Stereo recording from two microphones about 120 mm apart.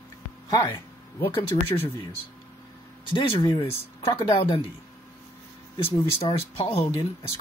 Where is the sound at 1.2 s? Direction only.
50° left (ahead or behind).